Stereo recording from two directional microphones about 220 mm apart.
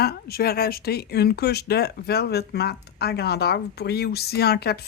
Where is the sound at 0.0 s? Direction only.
45° left (ahead or behind).